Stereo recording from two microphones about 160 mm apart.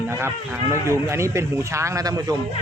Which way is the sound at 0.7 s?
15° right (ahead or behind).